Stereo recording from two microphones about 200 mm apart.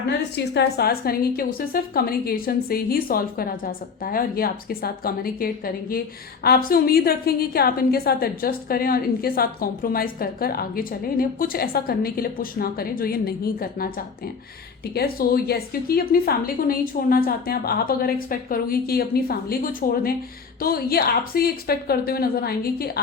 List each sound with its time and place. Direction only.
0.3 s a woman's voice: 55° left (ahead or behind)
14.9 s a woman's voice: 50° left (ahead or behind)